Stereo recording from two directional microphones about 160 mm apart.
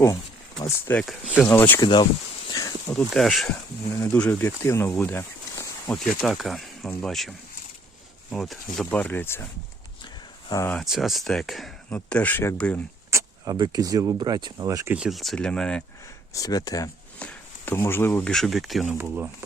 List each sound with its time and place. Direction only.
0.9 s speech: 15° left (ahead or behind)
1.8 s speech: 30° left (ahead or behind)
2.5 s a sound: 25° left (ahead or behind)
2.9 s speech: centre (ahead or behind)
3.8 s speech: 20° left (ahead or behind)
6.1 s speech: centre (ahead or behind)
10.7 s speech: centre (ahead or behind)
13.1 s speech: 20° right (ahead or behind)
14.9 s speech: centre (ahead or behind)
16.3 s speech: 20° left (ahead or behind)
17.2 s speech: 10° left (ahead or behind)
18.9 s speech: 10° right (ahead or behind)